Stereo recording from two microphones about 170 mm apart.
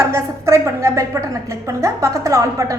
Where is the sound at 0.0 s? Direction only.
15° right (ahead or behind).